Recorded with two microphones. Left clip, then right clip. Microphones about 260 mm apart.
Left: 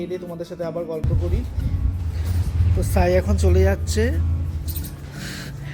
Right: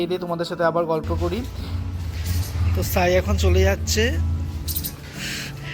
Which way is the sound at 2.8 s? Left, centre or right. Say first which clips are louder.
Right 1 dB; centre.